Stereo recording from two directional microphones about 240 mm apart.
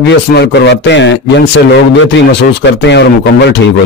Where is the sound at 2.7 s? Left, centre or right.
Left.